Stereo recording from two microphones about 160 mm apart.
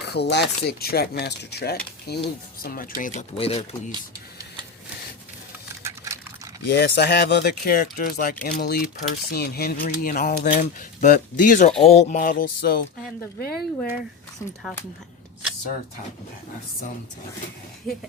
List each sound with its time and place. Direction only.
0.1 s speech: 90° left
0.6 s speech: 80° left
2.6 s speech: 65° left (ahead or behind)
3.3 s speech: 35° left (ahead or behind)
6.7 s speech: 90° left; by 10.5 s 65° left (ahead or behind)
10.6 s speech: 55° left (ahead or behind)
11.8 s a sound: 40° left (ahead or behind); by 12.8 s 65° left (ahead or behind)
13.4 s speech: 70° left (ahead or behind)
14.4 s speech: 20° left (ahead or behind)